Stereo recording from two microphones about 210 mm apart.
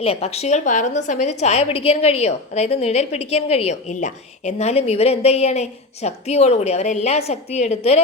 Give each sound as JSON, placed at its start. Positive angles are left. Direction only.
{"t": 0.0, "sound": "a woman's voice", "side_deg": 30}